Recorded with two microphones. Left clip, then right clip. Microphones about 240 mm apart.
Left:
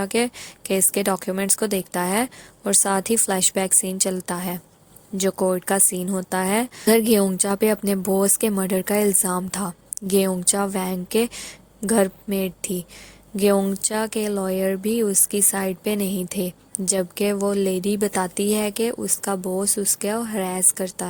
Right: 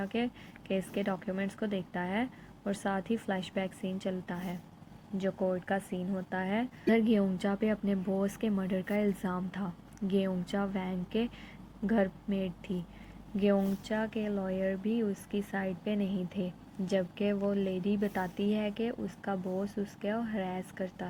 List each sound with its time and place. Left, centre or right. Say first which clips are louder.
0.0 s speech: left 12 dB; left